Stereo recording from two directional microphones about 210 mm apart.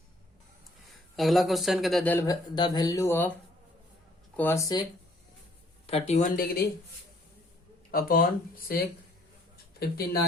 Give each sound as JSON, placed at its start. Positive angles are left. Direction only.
{"t": 1.1, "sound": "speech", "side_deg": 0}
{"t": 4.4, "sound": "speech", "side_deg": 10}
{"t": 5.8, "sound": "speech", "side_deg": 30}
{"t": 7.9, "sound": "speech", "side_deg": 45}
{"t": 9.8, "sound": "speech", "side_deg": 45}